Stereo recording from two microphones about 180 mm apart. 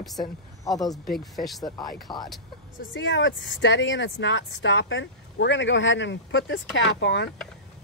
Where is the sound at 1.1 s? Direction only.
Centre (ahead or behind).